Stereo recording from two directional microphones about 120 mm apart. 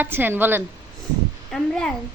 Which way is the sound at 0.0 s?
15° right (ahead or behind).